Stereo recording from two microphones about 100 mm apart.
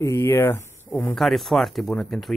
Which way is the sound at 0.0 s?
25° left (ahead or behind).